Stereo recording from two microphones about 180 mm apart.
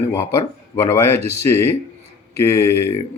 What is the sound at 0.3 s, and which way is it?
Speech, 15° left (ahead or behind).